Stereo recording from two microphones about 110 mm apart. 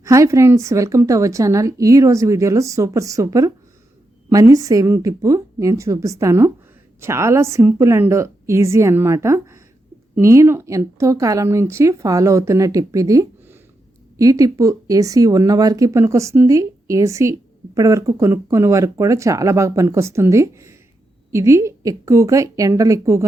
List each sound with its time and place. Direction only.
0.0 s a woman's voice: 30° right (ahead or behind)